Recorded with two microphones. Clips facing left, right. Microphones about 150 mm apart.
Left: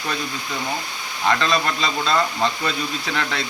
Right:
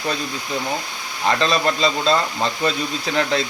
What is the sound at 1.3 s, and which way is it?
Speech, 30° right (ahead or behind).